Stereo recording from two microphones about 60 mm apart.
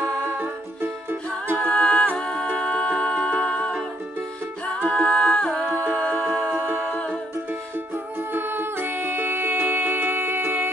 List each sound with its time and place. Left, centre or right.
1.7 s music: centre
6.9 s music: centre
8.3 s music: right